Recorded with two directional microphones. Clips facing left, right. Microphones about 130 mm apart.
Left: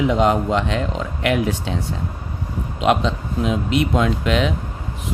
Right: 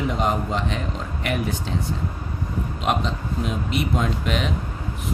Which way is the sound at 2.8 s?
90° left.